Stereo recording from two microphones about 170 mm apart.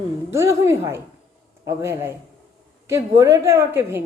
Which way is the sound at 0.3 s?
15° right (ahead or behind).